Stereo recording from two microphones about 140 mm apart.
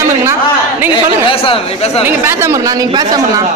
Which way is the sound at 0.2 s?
15° right (ahead or behind).